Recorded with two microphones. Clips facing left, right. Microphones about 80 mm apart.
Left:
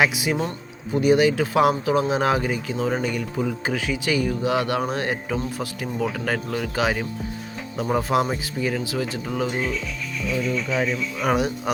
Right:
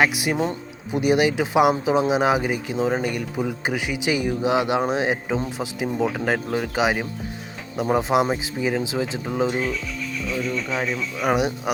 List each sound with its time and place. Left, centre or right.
0.0 s speech: centre
0.3 s speech: centre
10.5 s speech: centre